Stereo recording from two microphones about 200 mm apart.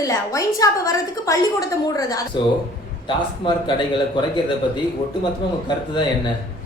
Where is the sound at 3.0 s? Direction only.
25° left (ahead or behind).